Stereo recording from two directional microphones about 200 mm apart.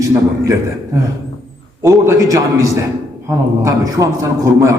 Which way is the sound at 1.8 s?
15° right (ahead or behind).